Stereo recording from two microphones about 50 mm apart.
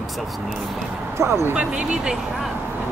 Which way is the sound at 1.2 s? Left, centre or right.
Right.